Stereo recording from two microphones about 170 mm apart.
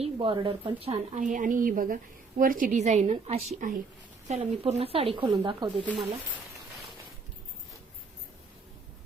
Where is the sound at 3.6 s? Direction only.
50° right (ahead or behind); by 5.9 s 25° right (ahead or behind).